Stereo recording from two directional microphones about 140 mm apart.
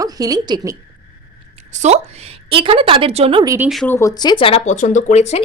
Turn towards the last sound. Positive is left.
turn(degrees=50)  # may be behind; listen again after turning